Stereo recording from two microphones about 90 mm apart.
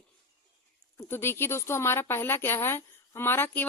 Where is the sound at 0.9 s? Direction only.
25° left (ahead or behind).